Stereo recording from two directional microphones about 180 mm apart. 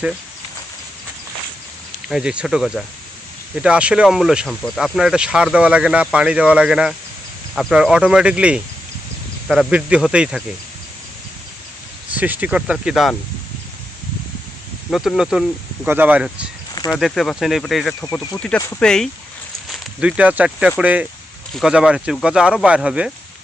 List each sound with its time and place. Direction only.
2.0 s speech: 5° right (ahead or behind)
12.1 s speech: 10° right (ahead or behind)
14.8 s speech: centre (ahead or behind)
16.7 s a sound: 20° left (ahead or behind)
17.0 s speech: centre (ahead or behind)
18.0 s speech: 15° left (ahead or behind); by 23.1 s 5° right (ahead or behind)